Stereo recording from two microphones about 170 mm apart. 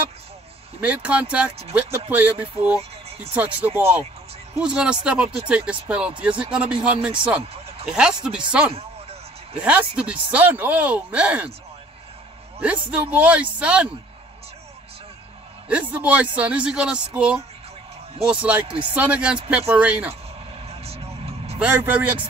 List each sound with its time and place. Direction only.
0.7 s speech: 10° right (ahead or behind)
3.3 s speech: 10° right (ahead or behind)
12.5 s a man's voice: 10° right (ahead or behind)
15.9 s speech: 10° right (ahead or behind)
20.6 s vehicle: 35° right (ahead or behind)
21.5 s speech: 10° right (ahead or behind)